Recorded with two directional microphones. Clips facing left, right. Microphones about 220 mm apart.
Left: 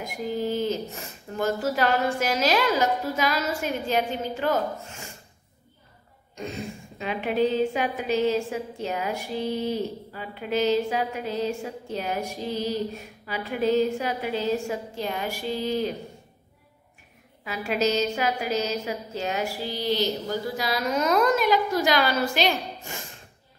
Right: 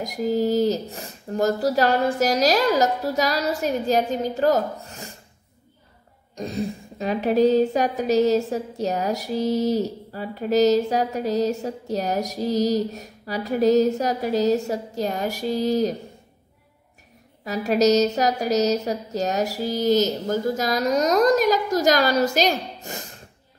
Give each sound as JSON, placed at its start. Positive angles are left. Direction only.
{"t": 0.0, "sound": "a woman's voice", "side_deg": -40}
{"t": 6.3, "sound": "a woman's voice", "side_deg": -35}
{"t": 17.5, "sound": "a woman's voice", "side_deg": -40}